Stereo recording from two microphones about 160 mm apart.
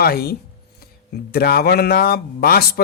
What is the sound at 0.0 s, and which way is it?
Speech, 75° left (ahead or behind).